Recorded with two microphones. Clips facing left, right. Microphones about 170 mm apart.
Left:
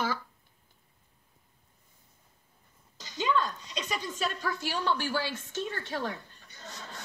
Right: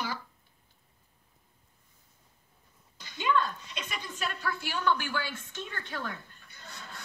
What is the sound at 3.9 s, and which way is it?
A woman's voice, 40° left (ahead or behind).